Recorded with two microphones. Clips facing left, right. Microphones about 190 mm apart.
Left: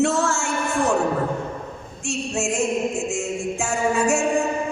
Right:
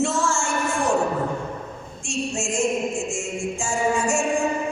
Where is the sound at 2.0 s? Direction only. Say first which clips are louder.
Left 2 dB; 65° left (ahead or behind).